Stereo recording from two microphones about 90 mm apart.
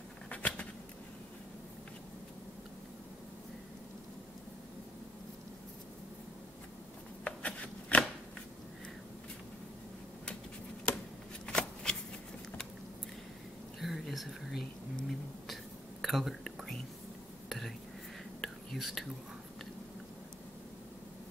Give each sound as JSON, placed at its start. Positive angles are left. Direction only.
{"t": 0.3, "sound": "a sound", "side_deg": 15}
{"t": 7.2, "sound": "insect", "side_deg": 15}
{"t": 11.4, "sound": "shuffling cards", "side_deg": 10}
{"t": 13.7, "sound": "whispering", "side_deg": 0}